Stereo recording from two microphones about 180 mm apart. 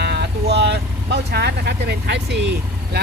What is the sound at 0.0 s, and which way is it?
Vehicle, 65° right (ahead or behind).